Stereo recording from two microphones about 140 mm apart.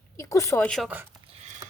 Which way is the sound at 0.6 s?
5° left (ahead or behind).